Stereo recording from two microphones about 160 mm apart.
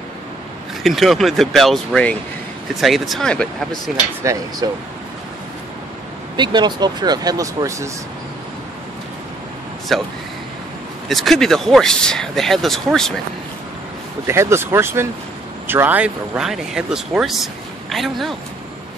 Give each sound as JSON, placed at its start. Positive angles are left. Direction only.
{"t": 0.8, "sound": "speech", "side_deg": 0}
{"t": 4.2, "sound": "speech", "side_deg": -20}
{"t": 6.3, "sound": "speech", "side_deg": -30}
{"t": 9.9, "sound": "speech", "side_deg": 0}
{"t": 14.2, "sound": "speech", "side_deg": -15}